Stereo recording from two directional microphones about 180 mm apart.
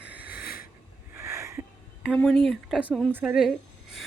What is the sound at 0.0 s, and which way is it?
Sniff, 10° right (ahead or behind).